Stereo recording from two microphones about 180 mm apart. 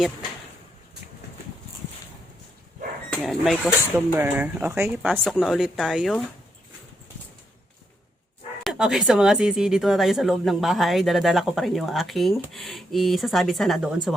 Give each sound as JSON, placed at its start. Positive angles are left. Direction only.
{"t": 3.1, "sound": "speech", "side_deg": 0}
{"t": 5.2, "sound": "speech", "side_deg": 0}
{"t": 8.6, "sound": "speech", "side_deg": 0}